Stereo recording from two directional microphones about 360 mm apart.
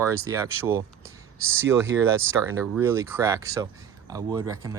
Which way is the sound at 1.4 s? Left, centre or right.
Right.